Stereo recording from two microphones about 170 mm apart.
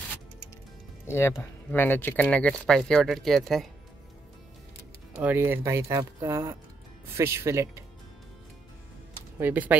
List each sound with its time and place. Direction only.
1.0 s speech: 15° left (ahead or behind)
5.2 s speech: 10° right (ahead or behind)
9.4 s speech: 10° right (ahead or behind)